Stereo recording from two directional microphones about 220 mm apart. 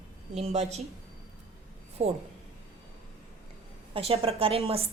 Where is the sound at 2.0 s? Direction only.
30° right (ahead or behind).